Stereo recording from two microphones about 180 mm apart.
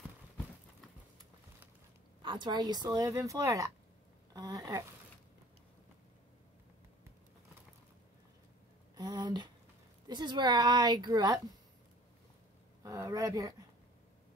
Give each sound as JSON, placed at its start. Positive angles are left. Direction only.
{"t": 2.2, "sound": "speech", "side_deg": -25}
{"t": 8.9, "sound": "a sound", "side_deg": -20}
{"t": 10.0, "sound": "speech", "side_deg": -25}
{"t": 12.8, "sound": "speech", "side_deg": -20}